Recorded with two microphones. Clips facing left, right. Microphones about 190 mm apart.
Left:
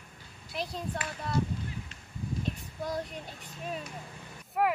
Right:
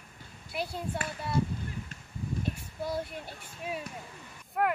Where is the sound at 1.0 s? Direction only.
50° right (ahead or behind).